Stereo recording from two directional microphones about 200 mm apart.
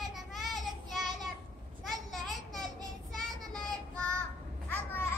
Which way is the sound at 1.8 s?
Centre (ahead or behind).